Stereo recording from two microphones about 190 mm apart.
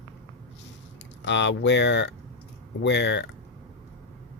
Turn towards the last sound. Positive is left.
turn(degrees=65)  # may be behind; listen again after turning